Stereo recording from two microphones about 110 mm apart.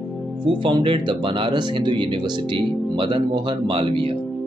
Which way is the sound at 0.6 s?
45° right (ahead or behind).